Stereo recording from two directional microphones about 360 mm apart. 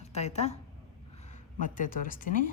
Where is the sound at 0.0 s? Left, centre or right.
Centre.